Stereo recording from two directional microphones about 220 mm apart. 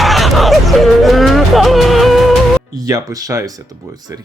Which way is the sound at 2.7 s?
15° right (ahead or behind).